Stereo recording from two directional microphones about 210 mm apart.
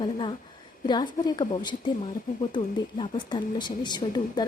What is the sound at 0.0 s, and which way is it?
A woman's voice, 25° left (ahead or behind).